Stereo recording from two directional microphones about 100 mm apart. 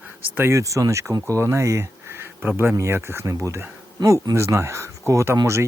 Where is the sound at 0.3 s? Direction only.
25° right (ahead or behind).